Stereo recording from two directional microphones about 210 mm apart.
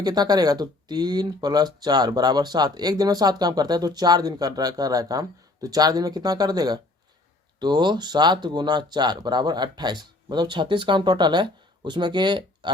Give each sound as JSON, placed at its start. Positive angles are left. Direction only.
{"t": 0.0, "sound": "speech", "side_deg": -20}